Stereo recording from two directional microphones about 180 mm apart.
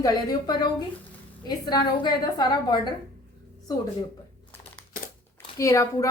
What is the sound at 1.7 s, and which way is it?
Speech, 20° left (ahead or behind).